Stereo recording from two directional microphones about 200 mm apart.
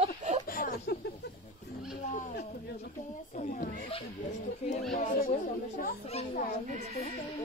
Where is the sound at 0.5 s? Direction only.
45° left (ahead or behind).